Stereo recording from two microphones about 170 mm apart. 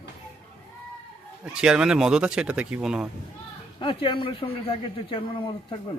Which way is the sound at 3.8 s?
30° left (ahead or behind).